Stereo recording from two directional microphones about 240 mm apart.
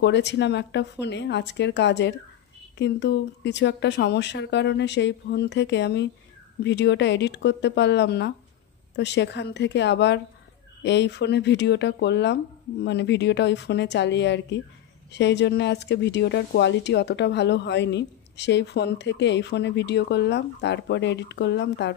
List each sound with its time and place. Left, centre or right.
0.0 s speech: left